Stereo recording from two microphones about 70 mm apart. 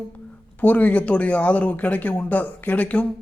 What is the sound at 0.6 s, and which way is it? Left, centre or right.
Speech, left.